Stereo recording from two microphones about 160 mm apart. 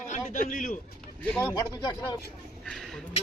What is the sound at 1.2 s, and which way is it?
Speech, 10° left (ahead or behind).